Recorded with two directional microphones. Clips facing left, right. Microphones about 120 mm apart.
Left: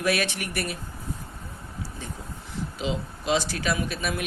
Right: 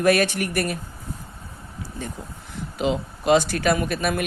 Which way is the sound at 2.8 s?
55° right (ahead or behind).